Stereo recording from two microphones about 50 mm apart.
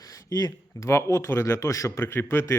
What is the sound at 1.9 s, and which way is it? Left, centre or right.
Speech, left.